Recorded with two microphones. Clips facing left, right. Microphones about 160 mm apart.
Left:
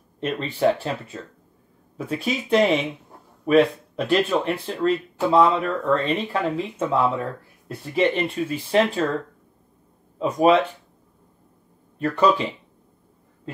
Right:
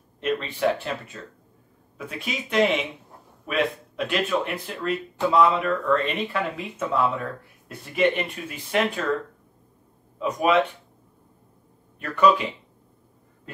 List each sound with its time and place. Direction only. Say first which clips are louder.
0.2 s speech: left 2 dB; 35° left (ahead or behind)
10.1 s speech: left 4 dB; 30° left (ahead or behind)
12.0 s speech: even; 30° left (ahead or behind)